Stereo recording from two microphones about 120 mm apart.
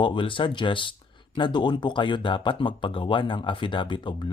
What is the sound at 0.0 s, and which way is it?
Speech, 45° left (ahead or behind).